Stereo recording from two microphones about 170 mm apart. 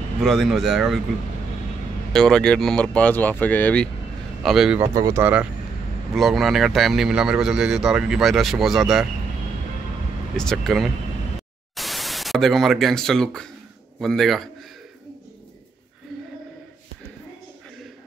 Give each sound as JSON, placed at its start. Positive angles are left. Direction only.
{"t": 0.2, "sound": "a man's voice", "side_deg": 0}
{"t": 2.1, "sound": "a man's voice", "side_deg": 5}
{"t": 4.9, "sound": "a man's voice", "side_deg": -20}
{"t": 10.3, "sound": "a man's voice", "side_deg": 5}